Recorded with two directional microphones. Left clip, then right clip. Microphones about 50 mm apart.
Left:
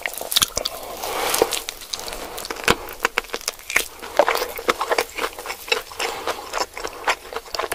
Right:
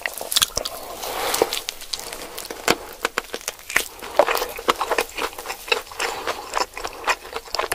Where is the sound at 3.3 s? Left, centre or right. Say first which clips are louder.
Left 1 dB; centre.